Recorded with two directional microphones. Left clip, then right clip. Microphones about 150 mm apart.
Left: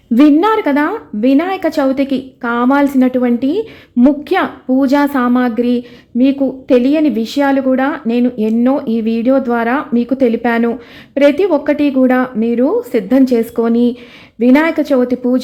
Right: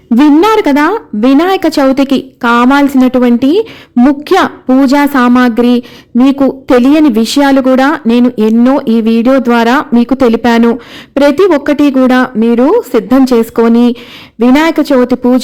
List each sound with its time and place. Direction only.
0.2 s speech: 30° right (ahead or behind)